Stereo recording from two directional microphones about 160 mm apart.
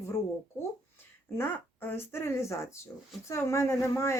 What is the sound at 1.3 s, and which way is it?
Speech, 15° left (ahead or behind).